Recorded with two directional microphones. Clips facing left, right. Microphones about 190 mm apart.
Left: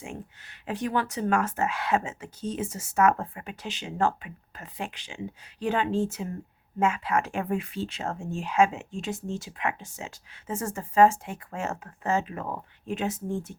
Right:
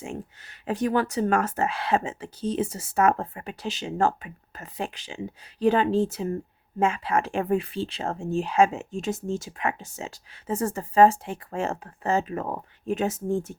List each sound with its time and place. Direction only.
0.0 s speech: 35° right (ahead or behind)